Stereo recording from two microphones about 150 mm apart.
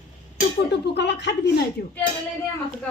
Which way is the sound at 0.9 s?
90° left.